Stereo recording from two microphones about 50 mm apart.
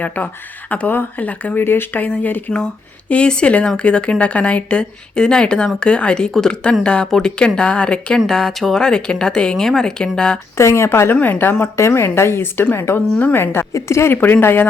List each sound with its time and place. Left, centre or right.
0.0 s speech: left
1.5 s speech: left
3.1 s speech: left
8.3 s speech: centre
10.6 s speech: left
11.1 s speech: left
11.8 s a woman's voice: left
13.7 s speech: left
14.1 s a woman's voice: left